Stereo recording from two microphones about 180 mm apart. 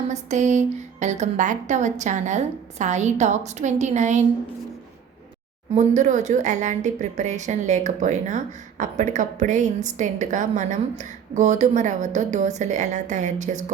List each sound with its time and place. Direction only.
0.1 s a woman's voice: 40° right (ahead or behind)
5.7 s a woman's voice: 40° right (ahead or behind)